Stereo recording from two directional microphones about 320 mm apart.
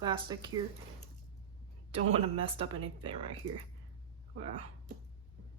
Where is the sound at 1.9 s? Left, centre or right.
Centre.